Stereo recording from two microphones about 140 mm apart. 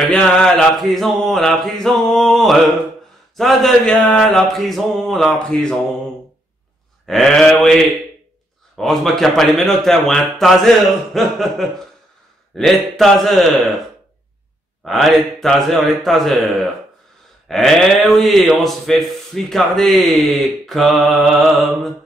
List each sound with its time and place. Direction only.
0.1 s speech: 5° left (ahead or behind)
7.1 s speech: 5° left (ahead or behind)
14.8 s speech: centre (ahead or behind)